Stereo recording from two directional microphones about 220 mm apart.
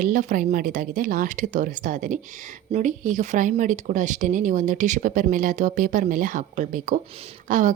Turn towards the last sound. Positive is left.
turn(degrees=-35)  # may be behind; listen again after turning